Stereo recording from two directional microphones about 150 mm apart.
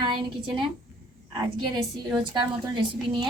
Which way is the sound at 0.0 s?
30° right (ahead or behind).